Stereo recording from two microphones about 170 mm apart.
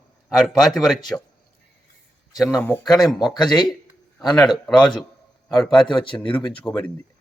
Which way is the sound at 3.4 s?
25° left (ahead or behind).